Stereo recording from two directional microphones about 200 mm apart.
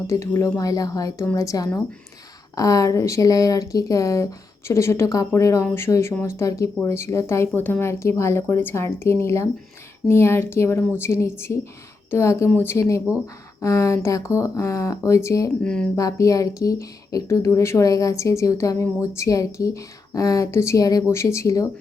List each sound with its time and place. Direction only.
0.1 s a woman's voice: 15° left (ahead or behind)
15.6 s speech: 5° left (ahead or behind)
16.0 s a woman's voice: 15° left (ahead or behind)